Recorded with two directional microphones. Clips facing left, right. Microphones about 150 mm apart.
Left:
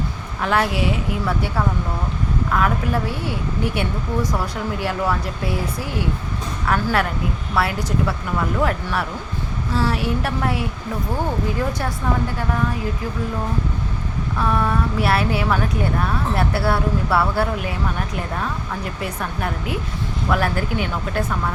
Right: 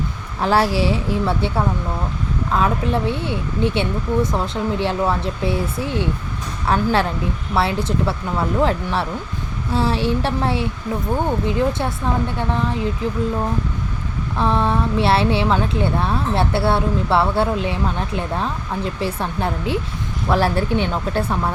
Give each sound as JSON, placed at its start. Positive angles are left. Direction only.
{"t": 0.4, "sound": "a woman's voice", "side_deg": -30}
{"t": 14.3, "sound": "a woman's voice", "side_deg": -25}
{"t": 18.9, "sound": "a woman's voice", "side_deg": -30}